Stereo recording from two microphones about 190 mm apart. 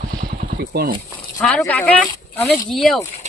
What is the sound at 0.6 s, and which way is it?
Speech, 55° right (ahead or behind).